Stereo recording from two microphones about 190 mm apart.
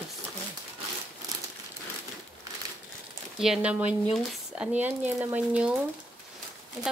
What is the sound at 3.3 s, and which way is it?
Speech, 5° right (ahead or behind).